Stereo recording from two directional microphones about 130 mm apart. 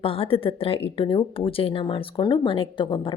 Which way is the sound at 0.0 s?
45° left (ahead or behind).